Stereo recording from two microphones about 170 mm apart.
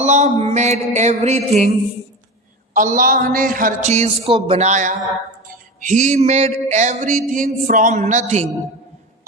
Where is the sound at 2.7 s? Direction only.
50° right (ahead or behind).